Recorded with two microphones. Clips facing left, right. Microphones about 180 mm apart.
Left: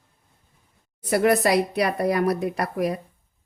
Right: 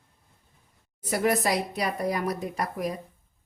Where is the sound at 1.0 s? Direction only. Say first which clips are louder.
Left 5 dB; 65° left (ahead or behind).